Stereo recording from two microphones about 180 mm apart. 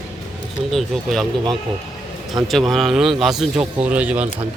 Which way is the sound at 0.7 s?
Centre (ahead or behind).